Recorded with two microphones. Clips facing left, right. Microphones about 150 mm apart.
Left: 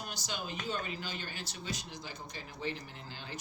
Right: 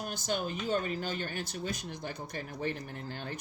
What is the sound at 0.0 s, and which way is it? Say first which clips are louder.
Speech: right 7 dB; 50° right (ahead or behind).